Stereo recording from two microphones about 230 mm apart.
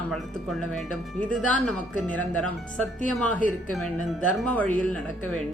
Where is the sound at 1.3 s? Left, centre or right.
Centre.